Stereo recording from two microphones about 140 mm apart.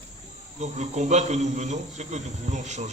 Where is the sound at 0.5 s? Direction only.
55° right (ahead or behind).